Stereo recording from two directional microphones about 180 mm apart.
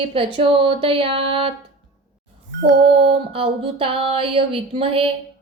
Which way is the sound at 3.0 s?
30° right (ahead or behind).